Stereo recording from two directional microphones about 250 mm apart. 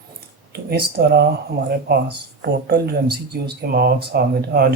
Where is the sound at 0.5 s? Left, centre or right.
Right.